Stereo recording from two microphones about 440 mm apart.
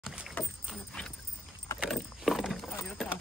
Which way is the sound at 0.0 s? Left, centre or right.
Centre.